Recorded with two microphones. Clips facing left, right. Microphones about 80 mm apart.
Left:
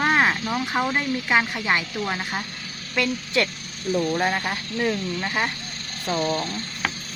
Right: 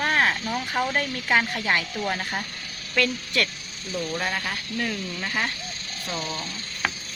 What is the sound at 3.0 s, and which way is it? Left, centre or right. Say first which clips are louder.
Speech: left 2 dB; left.